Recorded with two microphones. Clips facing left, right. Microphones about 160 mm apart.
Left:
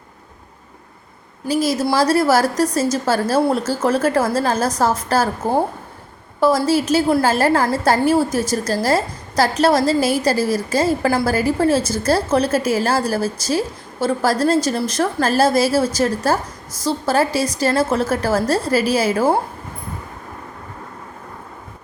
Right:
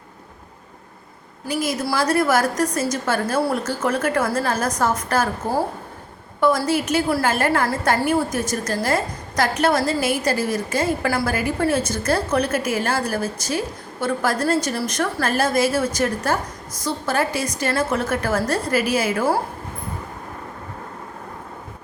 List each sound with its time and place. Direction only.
1.5 s a woman's voice: 35° left (ahead or behind)